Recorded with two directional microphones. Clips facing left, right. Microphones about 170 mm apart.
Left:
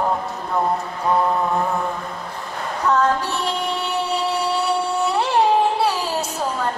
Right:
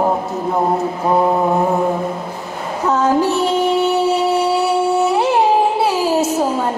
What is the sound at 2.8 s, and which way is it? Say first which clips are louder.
Speech: right 4 dB; 20° right (ahead or behind).